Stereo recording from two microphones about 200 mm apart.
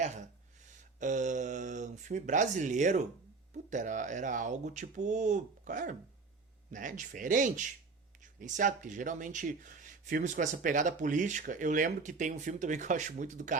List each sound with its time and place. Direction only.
0.7 s speech: 40° right (ahead or behind)